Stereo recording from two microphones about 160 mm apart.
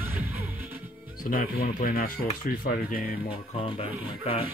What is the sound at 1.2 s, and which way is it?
Speech, 65° left (ahead or behind).